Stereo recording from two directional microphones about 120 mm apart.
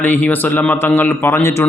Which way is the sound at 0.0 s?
15° left (ahead or behind).